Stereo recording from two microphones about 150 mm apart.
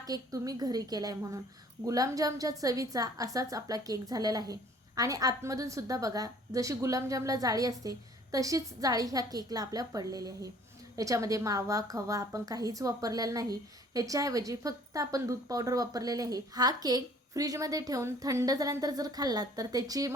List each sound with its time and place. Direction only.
0.0 s a woman's voice: 25° right (ahead or behind)